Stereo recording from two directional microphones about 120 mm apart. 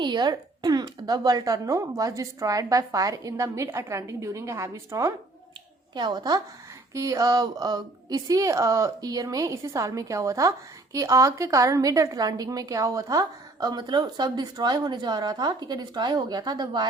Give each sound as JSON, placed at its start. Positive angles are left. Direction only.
{"t": 0.0, "sound": "a woman's voice", "side_deg": -40}
{"t": 5.9, "sound": "a woman's voice", "side_deg": -40}